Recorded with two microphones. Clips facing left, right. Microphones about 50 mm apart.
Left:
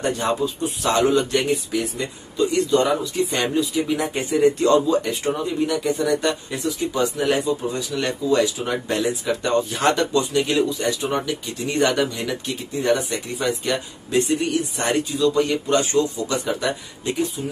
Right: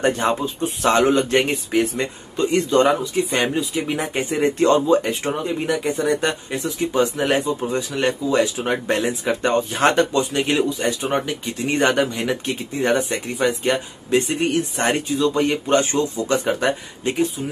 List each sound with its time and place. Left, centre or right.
0.0 s speech: right
3.0 s speech: right